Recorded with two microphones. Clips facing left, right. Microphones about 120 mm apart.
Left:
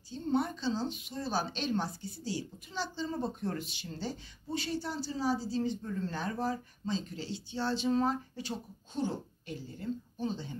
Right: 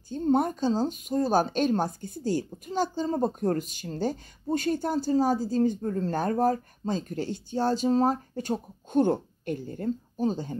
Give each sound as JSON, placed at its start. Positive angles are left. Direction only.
{"t": 0.1, "sound": "a woman's voice", "side_deg": -45}